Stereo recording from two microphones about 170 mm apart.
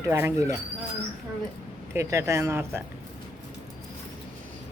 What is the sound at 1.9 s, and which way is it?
Speech, 20° right (ahead or behind).